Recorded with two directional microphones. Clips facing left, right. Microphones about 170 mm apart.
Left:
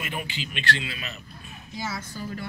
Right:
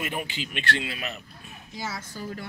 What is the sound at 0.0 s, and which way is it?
Speech, 45° right (ahead or behind).